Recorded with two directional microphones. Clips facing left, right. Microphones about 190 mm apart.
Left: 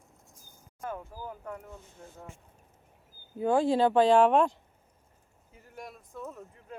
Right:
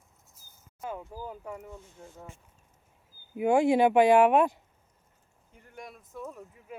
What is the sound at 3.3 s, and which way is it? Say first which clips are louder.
Speech: right 2 dB; 15° right (ahead or behind).